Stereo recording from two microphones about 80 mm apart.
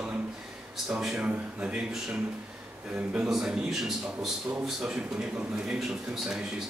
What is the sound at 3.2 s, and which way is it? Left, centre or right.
A man's voice, centre.